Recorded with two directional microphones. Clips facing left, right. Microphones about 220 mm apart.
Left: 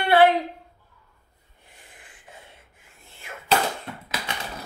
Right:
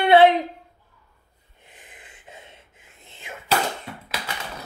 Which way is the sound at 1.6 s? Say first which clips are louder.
Right 3 dB; 20° right (ahead or behind).